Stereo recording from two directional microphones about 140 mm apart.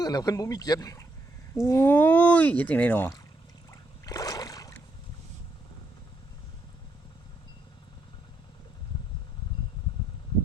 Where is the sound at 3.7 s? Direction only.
25° left (ahead or behind).